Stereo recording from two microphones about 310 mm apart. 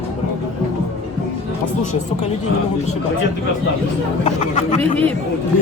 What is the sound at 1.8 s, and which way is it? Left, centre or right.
Speech, left.